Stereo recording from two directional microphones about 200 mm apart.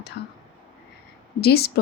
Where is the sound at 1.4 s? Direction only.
50° left (ahead or behind).